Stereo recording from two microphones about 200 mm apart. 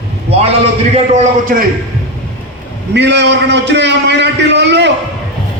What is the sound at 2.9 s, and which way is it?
A man's voice, 60° right (ahead or behind).